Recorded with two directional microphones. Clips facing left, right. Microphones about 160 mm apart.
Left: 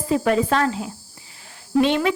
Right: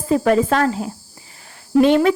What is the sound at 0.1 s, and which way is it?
Speech, 45° right (ahead or behind).